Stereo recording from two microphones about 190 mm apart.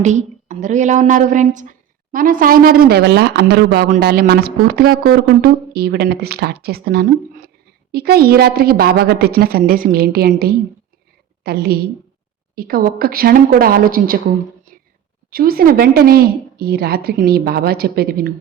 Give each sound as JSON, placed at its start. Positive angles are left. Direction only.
{"t": 0.0, "sound": "a woman's voice", "side_deg": -40}
{"t": 3.8, "sound": "a woman's voice", "side_deg": -45}
{"t": 15.3, "sound": "a woman's voice", "side_deg": -50}